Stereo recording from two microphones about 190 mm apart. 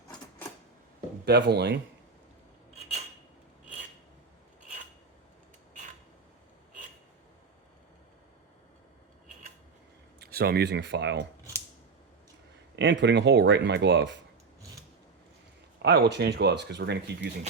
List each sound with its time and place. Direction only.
1.2 s speech: 60° right (ahead or behind)
10.2 s speech: 55° right (ahead or behind)
12.7 s speech: 70° right (ahead or behind)
15.8 s speech: 60° right (ahead or behind)